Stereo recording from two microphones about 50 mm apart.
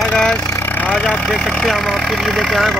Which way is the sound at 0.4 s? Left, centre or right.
Left.